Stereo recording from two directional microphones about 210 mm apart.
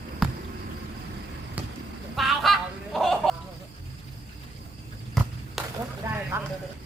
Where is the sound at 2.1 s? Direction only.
Centre (ahead or behind).